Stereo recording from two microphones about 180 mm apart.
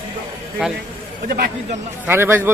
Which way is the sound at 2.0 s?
10° right (ahead or behind).